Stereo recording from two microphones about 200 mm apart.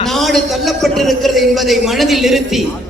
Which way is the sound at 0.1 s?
Centre (ahead or behind).